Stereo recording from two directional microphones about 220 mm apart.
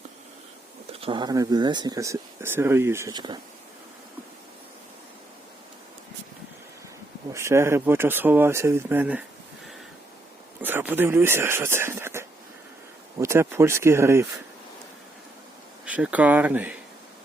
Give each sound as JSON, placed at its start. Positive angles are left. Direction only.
{"t": 1.0, "sound": "speech", "side_deg": -20}
{"t": 7.3, "sound": "speech", "side_deg": -10}
{"t": 10.6, "sound": "speech", "side_deg": -10}
{"t": 15.9, "sound": "speech", "side_deg": -5}